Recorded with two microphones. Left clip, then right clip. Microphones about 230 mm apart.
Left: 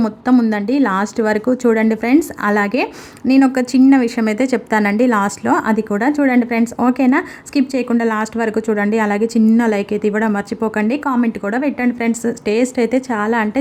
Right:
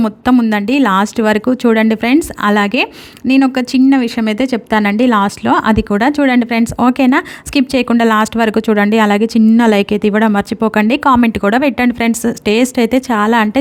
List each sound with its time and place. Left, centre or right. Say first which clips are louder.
0.5 s speech: right 4 dB; right
2.1 s speech: right 2 dB; right